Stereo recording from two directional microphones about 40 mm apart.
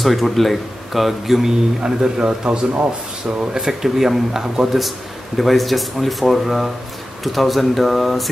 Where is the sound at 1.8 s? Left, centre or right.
Right.